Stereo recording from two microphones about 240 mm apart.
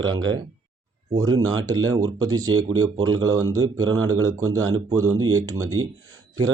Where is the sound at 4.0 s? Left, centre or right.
Right.